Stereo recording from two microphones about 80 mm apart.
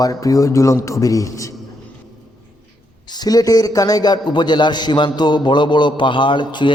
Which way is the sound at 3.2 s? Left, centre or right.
Left.